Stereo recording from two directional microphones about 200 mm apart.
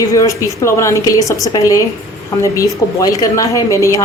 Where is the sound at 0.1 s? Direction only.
15° left (ahead or behind).